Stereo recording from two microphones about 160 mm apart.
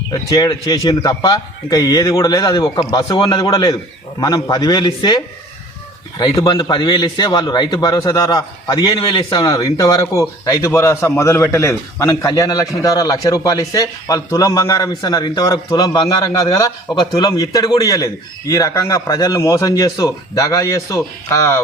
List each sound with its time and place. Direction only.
0.1 s a man's voice: 20° left (ahead or behind)